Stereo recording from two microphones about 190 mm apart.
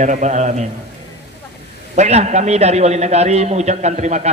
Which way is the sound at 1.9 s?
35° right (ahead or behind).